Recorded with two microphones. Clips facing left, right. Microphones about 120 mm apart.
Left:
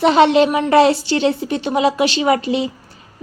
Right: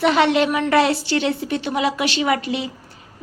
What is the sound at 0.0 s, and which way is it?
A woman's voice, 25° left (ahead or behind).